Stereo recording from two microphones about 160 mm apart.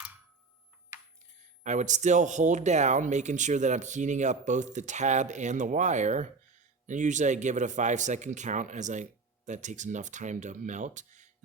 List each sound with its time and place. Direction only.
1.6 s speech: 50° right (ahead or behind)